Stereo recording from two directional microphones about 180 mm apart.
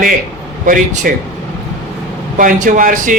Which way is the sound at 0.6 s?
50° right (ahead or behind).